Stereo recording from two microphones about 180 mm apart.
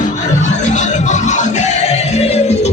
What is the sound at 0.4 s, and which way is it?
Music, 40° left (ahead or behind).